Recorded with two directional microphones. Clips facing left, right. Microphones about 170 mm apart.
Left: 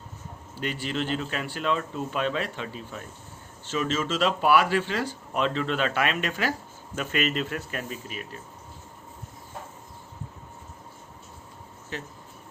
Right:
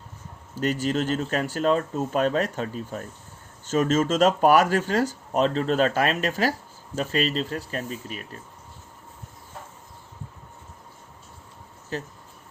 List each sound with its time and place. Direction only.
0.5 s speech: 40° right (ahead or behind)
11.9 s speech: 35° right (ahead or behind)